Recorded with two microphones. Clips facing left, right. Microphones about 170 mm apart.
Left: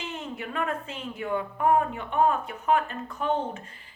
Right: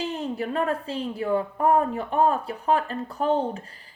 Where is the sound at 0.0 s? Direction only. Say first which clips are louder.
Right 7 dB; 35° right (ahead or behind).